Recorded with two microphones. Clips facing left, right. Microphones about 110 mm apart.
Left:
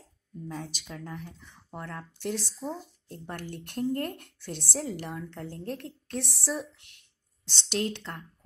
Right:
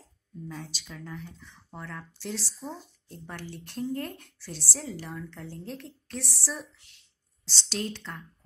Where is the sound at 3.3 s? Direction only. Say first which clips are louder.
Left 2 dB; 55° left (ahead or behind).